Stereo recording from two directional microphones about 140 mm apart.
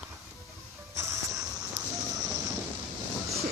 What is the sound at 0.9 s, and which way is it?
Music, 25° right (ahead or behind).